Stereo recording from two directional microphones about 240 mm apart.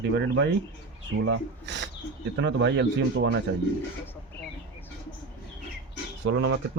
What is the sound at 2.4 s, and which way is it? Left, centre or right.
Speech, right.